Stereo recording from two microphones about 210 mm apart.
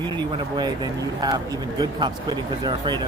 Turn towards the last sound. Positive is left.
turn(degrees=-20)  # may be behind; listen again after turning